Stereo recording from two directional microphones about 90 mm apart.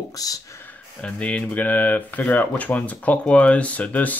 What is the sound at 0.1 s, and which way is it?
Speech, 40° left (ahead or behind).